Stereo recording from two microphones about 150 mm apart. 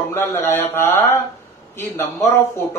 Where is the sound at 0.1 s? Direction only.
15° left (ahead or behind).